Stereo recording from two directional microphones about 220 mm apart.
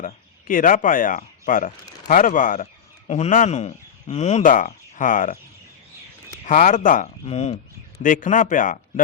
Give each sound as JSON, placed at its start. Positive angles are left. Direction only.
{"t": 0.0, "sound": "speech", "side_deg": 40}
{"t": 6.4, "sound": "speech", "side_deg": 35}